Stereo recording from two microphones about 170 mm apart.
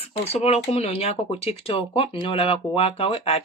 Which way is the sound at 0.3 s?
35° left (ahead or behind).